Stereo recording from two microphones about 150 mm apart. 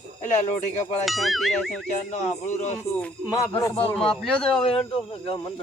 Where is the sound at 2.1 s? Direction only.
50° left (ahead or behind).